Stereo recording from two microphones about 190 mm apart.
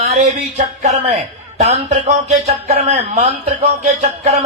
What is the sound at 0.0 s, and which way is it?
Speech, 35° right (ahead or behind).